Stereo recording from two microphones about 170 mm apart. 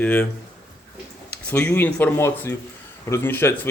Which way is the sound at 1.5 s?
10° left (ahead or behind).